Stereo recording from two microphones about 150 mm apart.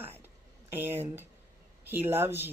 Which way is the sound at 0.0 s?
15° right (ahead or behind).